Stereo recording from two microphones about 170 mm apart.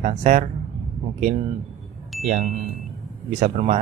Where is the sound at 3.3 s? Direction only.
45° right (ahead or behind).